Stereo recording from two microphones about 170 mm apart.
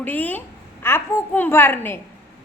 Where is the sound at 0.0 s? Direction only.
10° left (ahead or behind).